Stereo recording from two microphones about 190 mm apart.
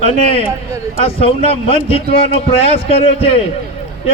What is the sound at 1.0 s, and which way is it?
A man's voice, 30° left (ahead or behind).